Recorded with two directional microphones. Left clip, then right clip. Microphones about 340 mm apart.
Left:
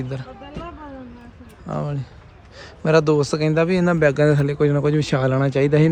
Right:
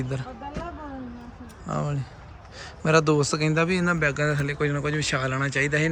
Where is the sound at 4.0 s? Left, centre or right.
Centre.